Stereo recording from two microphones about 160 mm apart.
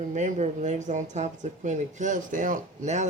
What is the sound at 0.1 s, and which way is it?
Speech, 50° right (ahead or behind).